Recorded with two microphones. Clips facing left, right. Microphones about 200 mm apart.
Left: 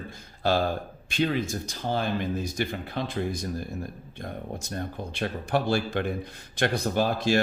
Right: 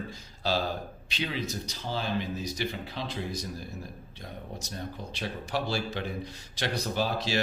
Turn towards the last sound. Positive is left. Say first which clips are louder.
# left 5 dB
turn(degrees=50)  # may be behind; listen again after turning